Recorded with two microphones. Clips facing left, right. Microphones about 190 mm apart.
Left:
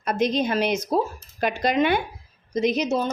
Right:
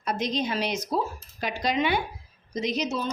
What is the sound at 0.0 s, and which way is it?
A woman's voice, 55° left (ahead or behind).